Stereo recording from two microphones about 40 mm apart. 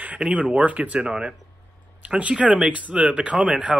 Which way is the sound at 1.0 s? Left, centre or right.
Centre.